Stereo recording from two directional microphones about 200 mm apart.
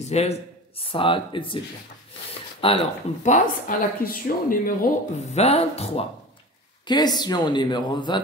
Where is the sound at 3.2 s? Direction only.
40° left (ahead or behind).